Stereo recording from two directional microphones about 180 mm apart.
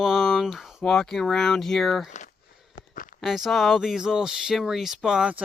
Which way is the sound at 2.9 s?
50° left (ahead or behind).